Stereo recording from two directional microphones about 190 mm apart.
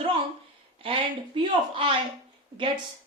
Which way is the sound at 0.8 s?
30° right (ahead or behind).